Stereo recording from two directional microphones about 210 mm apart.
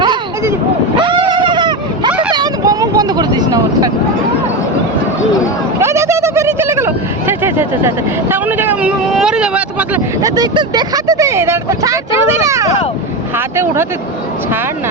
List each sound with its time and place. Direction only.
0.0 s vehicle: 20° right (ahead or behind)
5.8 s a sound: 15° right (ahead or behind)
10.2 s speech: 15° right (ahead or behind)